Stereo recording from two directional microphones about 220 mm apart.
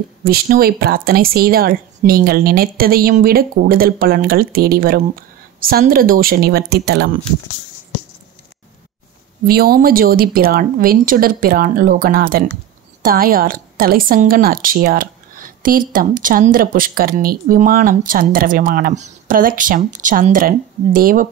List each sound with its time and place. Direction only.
0.2 s a woman's voice: 45° right (ahead or behind)
9.5 s a woman's voice: 45° right (ahead or behind)